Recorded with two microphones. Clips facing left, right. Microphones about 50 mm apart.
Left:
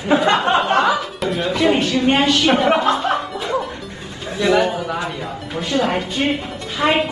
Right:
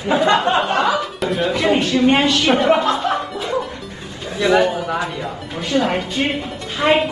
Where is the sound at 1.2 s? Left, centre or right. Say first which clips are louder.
Right 1 dB; centre.